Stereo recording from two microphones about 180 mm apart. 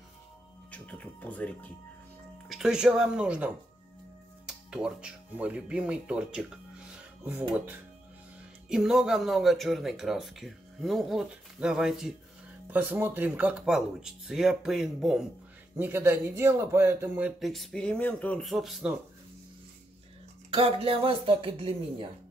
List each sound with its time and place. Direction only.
0.7 s speech: 5° left (ahead or behind)
15.8 s speech: 15° right (ahead or behind)
17.4 s speech: centre (ahead or behind)
20.5 s speech: 30° right (ahead or behind)